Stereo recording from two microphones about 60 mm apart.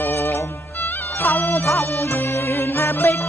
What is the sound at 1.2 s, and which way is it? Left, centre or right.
Music, left.